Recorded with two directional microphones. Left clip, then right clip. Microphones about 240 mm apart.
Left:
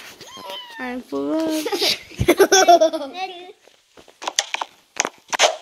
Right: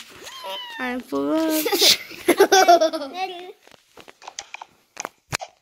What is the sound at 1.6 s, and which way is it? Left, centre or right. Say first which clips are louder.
Speech: right 2 dB; right.